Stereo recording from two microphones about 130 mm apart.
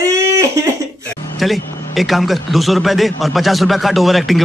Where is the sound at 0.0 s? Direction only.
25° right (ahead or behind).